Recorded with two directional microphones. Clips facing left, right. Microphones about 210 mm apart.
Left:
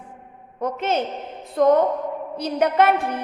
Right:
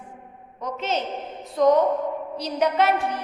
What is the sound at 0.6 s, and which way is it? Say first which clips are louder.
A woman's voice: left 4 dB; 55° left (ahead or behind).